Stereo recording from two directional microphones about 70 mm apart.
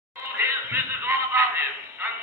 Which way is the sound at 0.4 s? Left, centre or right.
Right.